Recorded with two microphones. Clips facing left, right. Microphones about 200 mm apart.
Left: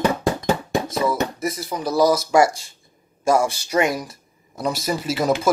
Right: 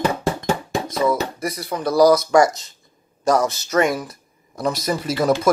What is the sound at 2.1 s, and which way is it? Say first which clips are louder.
Speech: right 2 dB; 25° left (ahead or behind).